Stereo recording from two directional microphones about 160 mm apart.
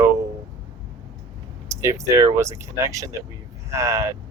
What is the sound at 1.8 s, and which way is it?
Speech, 20° right (ahead or behind).